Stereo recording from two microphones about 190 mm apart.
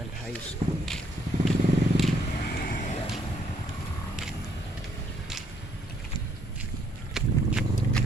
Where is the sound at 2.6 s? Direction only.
45° left (ahead or behind).